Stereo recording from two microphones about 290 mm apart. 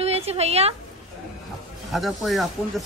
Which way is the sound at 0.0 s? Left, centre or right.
Right.